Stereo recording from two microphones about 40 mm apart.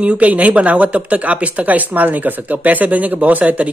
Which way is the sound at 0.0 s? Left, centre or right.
Right.